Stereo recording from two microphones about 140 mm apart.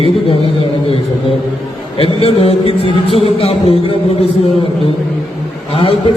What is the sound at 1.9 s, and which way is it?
Speech, 45° left (ahead or behind).